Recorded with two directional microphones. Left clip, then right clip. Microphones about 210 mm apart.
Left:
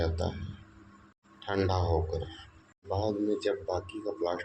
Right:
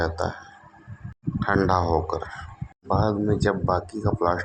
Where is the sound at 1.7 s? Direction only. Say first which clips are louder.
Right 8 dB; 20° right (ahead or behind).